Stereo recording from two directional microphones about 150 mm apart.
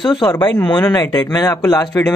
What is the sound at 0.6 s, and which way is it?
Speech, 30° left (ahead or behind).